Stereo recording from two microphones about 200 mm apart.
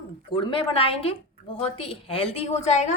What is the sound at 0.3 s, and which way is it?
A woman's voice, 25° left (ahead or behind).